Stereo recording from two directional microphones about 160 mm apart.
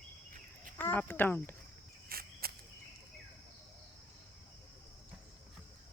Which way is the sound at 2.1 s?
70° right (ahead or behind).